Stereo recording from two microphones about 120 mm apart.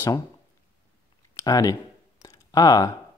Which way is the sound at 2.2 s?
30° left (ahead or behind).